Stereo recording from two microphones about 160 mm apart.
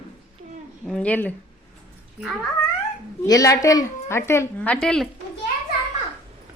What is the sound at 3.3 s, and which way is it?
A woman's voice, 20° left (ahead or behind).